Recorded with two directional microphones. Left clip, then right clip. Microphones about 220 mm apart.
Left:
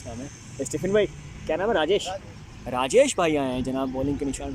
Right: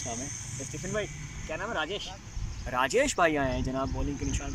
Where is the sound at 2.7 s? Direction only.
15° left (ahead or behind).